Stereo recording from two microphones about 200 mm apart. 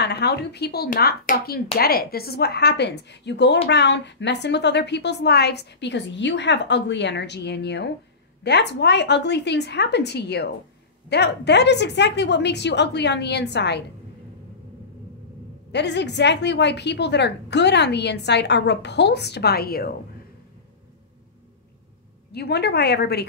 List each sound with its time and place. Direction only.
0.0 s a woman's voice: 55° left (ahead or behind)
15.7 s a woman's voice: 60° left (ahead or behind)
22.3 s a woman's voice: 55° left (ahead or behind)